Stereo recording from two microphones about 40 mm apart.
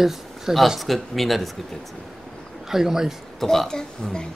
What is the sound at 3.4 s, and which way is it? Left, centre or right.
Speech, centre.